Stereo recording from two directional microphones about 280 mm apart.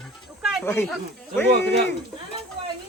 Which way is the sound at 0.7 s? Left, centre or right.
Centre.